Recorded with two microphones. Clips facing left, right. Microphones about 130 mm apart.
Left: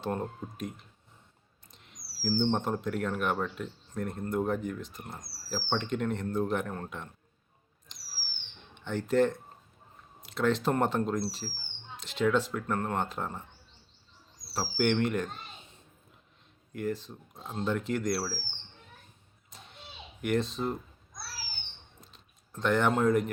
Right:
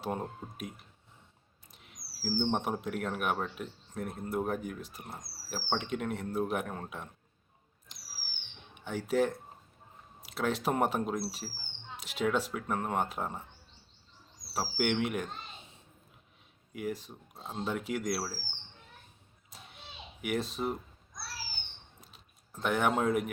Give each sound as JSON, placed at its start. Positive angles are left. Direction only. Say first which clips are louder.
{"t": 0.0, "sound": "speech", "louder": "left 2 dB", "side_deg": -10}
{"t": 1.7, "sound": "speech", "louder": "left 1 dB", "side_deg": -5}
{"t": 7.9, "sound": "a sound", "louder": "left 1 dB", "side_deg": -5}
{"t": 10.2, "sound": "speech", "louder": "left 4 dB", "side_deg": -5}
{"t": 14.5, "sound": "speech", "louder": "left 3 dB", "side_deg": -10}
{"t": 16.7, "sound": "speech", "louder": "left 3 dB", "side_deg": -10}
{"t": 20.2, "sound": "speech", "louder": "left 3 dB", "side_deg": -5}
{"t": 22.0, "sound": "a sound", "louder": "left 1 dB", "side_deg": -5}